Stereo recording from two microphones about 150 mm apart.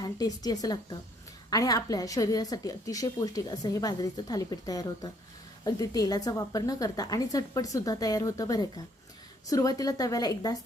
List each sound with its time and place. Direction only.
0.0 s a woman's voice: 25° left (ahead or behind)